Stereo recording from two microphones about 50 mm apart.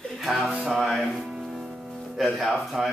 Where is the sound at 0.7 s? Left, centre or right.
Centre.